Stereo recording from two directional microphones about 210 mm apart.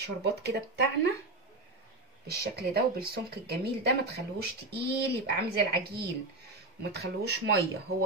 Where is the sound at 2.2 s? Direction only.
50° right (ahead or behind).